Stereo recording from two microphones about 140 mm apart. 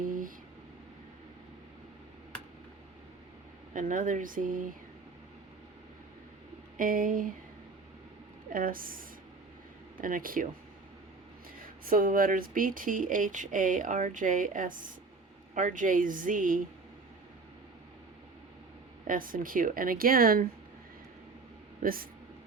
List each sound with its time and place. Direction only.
0.1 s a sound: 75° right (ahead or behind)
3.8 s speech: 70° right (ahead or behind)
6.7 s speech: 80° right
8.5 s speech: 85° right
11.6 s speech: 85° right
19.0 s speech: 75° right (ahead or behind)
21.8 s speech: 90° right